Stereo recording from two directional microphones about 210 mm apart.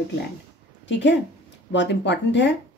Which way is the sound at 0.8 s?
55° left (ahead or behind).